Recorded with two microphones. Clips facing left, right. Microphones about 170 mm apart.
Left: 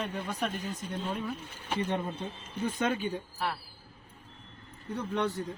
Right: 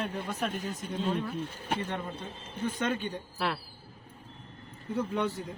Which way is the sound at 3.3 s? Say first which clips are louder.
Right 2 dB; 90° right.